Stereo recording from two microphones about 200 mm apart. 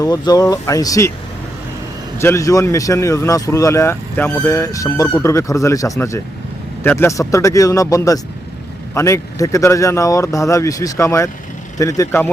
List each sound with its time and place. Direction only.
0.0 s speech: 20° left (ahead or behind)
2.1 s speech: 15° left (ahead or behind)